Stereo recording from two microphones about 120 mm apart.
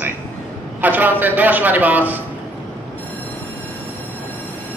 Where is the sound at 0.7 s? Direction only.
15° right (ahead or behind).